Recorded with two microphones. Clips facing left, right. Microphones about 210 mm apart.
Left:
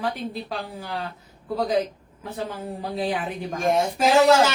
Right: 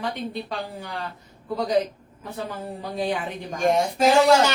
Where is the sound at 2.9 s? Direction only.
Centre (ahead or behind).